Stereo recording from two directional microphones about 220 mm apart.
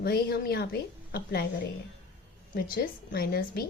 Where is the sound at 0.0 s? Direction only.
45° left (ahead or behind).